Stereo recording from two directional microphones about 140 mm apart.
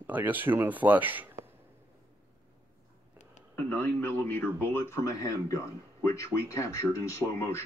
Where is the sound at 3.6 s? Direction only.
15° left (ahead or behind).